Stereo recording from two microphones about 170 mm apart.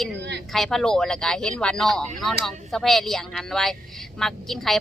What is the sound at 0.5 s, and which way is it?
Speech, centre (ahead or behind).